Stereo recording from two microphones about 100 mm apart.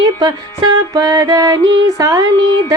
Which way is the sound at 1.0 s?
35° right (ahead or behind).